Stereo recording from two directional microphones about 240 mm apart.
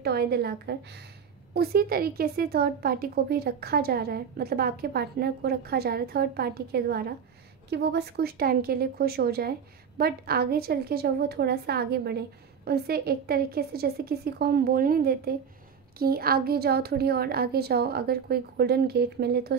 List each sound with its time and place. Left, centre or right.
0.0 s a woman's voice: right